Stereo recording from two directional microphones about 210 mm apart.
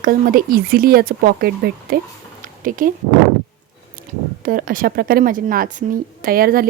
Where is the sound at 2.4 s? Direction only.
40° right (ahead or behind).